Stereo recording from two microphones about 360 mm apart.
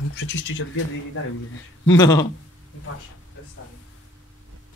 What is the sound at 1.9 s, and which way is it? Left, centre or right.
Speech, centre.